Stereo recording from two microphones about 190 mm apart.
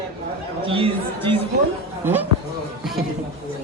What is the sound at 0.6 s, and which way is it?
Speech, 30° right (ahead or behind).